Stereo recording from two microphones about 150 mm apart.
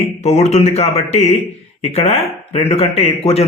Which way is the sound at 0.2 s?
45° left (ahead or behind).